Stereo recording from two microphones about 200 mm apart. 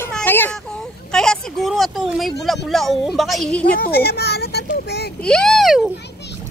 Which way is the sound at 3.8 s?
50° left (ahead or behind).